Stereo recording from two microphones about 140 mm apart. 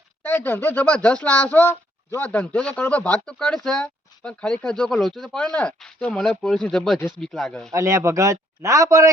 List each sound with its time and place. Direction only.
0.2 s speech: 15° left (ahead or behind)
7.7 s speech: 20° right (ahead or behind)